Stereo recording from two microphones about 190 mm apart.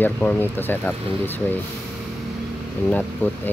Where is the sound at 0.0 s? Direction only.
10° left (ahead or behind).